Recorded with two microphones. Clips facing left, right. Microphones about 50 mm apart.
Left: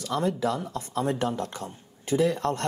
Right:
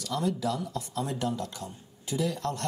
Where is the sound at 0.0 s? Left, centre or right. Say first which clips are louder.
Left 3 dB; left.